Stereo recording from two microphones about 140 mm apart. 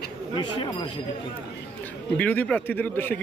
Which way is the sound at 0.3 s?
35° left (ahead or behind).